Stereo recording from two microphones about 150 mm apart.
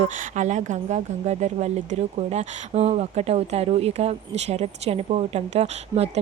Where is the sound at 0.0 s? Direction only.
50° right (ahead or behind).